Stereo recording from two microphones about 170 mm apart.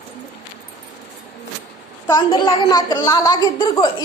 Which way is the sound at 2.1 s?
25° left (ahead or behind).